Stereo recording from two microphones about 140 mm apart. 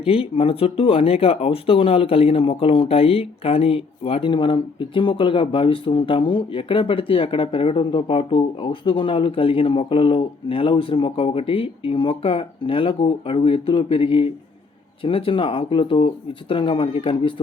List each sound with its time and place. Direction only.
0.0 s speech: 40° left (ahead or behind)